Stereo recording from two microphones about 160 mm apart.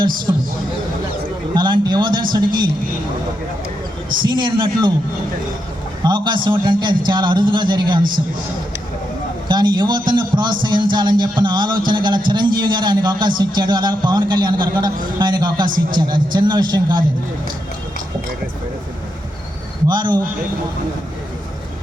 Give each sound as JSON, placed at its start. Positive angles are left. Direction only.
{"t": 0.3, "sound": "a man's voice", "side_deg": -20}
{"t": 1.5, "sound": "a sound", "side_deg": -30}
{"t": 2.3, "sound": "a man's voice", "side_deg": -25}
{"t": 4.2, "sound": "a man's voice", "side_deg": -30}
{"t": 6.0, "sound": "a man's voice", "side_deg": -30}
{"t": 9.5, "sound": "a man's voice", "side_deg": -25}
{"t": 19.9, "sound": "a man's voice", "side_deg": -25}